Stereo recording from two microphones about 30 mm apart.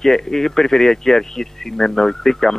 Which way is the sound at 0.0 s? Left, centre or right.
Centre.